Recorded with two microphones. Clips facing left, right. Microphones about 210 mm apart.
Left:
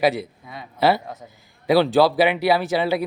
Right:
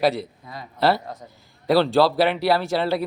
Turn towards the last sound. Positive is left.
turn(degrees=0)  # may be behind; listen again after turning